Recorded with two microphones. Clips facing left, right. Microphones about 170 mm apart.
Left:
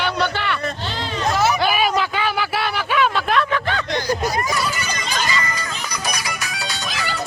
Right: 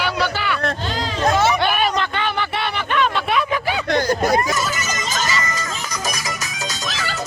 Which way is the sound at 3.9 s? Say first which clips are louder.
Right 5 dB; 50° right (ahead or behind).